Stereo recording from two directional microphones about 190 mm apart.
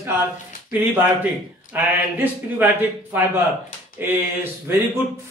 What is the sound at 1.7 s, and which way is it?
Speech, 10° right (ahead or behind).